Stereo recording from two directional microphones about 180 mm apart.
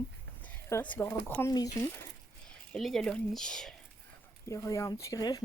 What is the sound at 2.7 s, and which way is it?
Speech, 5° left (ahead or behind).